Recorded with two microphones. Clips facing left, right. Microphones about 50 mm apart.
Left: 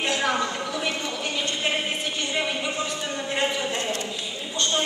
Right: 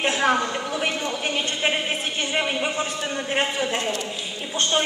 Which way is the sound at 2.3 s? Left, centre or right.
Right.